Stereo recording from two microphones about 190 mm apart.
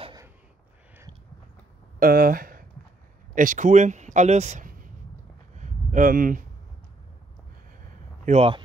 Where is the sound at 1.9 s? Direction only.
50° right (ahead or behind).